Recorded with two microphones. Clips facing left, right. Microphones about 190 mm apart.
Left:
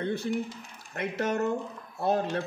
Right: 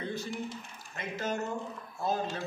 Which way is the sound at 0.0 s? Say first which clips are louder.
Left 7 dB; 65° left (ahead or behind).